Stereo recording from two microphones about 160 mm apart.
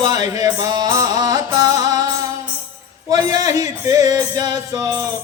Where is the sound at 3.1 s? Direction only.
20° right (ahead or behind).